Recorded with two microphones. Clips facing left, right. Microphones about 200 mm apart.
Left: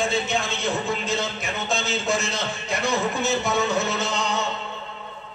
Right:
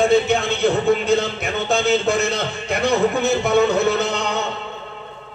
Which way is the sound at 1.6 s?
60° right (ahead or behind).